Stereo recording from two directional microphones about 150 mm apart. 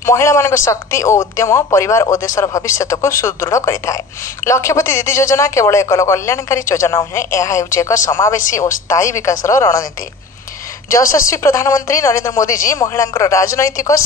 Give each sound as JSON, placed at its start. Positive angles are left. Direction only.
{"t": 0.0, "sound": "speech", "side_deg": 20}
{"t": 10.9, "sound": "speech", "side_deg": 20}